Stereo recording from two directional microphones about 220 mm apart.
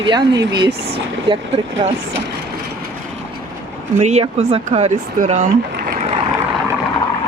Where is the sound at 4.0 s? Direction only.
30° right (ahead or behind).